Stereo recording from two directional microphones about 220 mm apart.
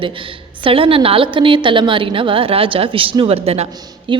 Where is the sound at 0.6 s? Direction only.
25° right (ahead or behind).